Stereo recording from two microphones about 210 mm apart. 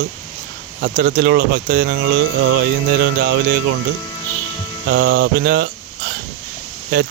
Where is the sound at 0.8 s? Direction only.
45° right (ahead or behind).